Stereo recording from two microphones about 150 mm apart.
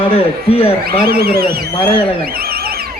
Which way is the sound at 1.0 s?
90° right.